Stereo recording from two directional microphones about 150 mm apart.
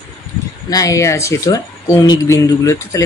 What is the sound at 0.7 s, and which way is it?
Speech, 25° left (ahead or behind).